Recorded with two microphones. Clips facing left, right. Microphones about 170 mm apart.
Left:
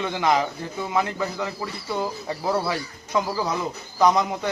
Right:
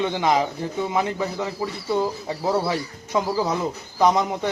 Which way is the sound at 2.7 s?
25° right (ahead or behind).